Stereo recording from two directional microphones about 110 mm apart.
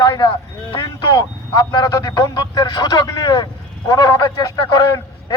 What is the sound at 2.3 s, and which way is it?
Speech, 40° left (ahead or behind).